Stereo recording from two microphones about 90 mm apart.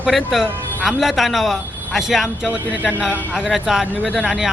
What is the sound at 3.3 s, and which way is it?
Speech, centre (ahead or behind).